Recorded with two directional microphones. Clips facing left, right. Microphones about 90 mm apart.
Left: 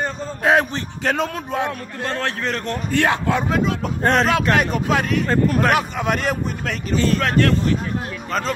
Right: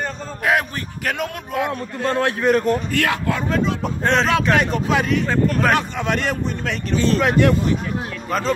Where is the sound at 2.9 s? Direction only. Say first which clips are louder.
Left 2 dB; 25° left (ahead or behind).